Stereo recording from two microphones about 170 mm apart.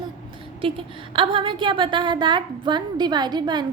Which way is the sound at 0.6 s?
30° right (ahead or behind).